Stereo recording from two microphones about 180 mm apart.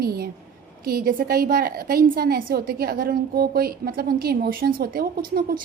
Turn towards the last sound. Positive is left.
turn(degrees=-55)  # may be behind; listen again after turning